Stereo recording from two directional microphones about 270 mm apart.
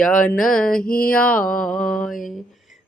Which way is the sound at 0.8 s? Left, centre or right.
Left.